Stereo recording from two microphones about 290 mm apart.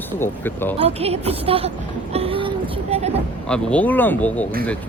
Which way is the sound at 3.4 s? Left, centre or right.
Centre.